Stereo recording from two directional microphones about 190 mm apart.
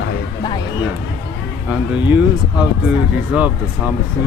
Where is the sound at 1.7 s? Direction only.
5° right (ahead or behind).